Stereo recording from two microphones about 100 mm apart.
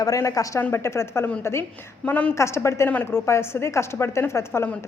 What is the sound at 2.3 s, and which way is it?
Speech, 25° left (ahead or behind).